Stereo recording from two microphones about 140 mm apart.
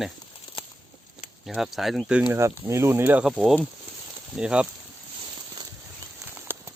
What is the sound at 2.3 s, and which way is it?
Speech, 20° right (ahead or behind).